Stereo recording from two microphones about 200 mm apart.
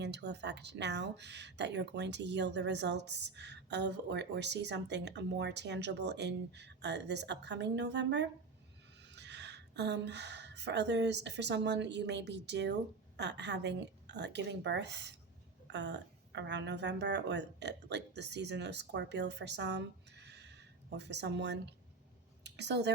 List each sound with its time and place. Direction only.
0.0 s a woman's voice: 60° right (ahead or behind)